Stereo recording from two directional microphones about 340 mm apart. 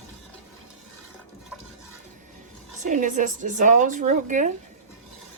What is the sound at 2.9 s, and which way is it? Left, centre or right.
Speech, right.